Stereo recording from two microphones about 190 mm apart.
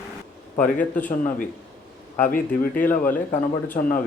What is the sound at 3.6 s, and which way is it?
Speech, 45° left (ahead or behind).